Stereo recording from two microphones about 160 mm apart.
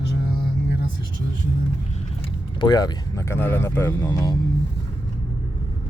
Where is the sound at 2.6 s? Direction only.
25° left (ahead or behind).